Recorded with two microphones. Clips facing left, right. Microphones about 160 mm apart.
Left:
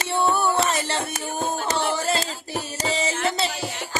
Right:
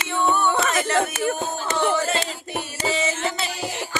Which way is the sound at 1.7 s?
35° left (ahead or behind).